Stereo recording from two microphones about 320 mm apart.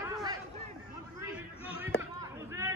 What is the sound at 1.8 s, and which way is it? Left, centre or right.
Chop, centre.